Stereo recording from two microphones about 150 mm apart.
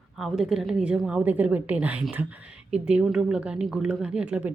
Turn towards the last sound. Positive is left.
turn(degrees=-10)  # may be behind; listen again after turning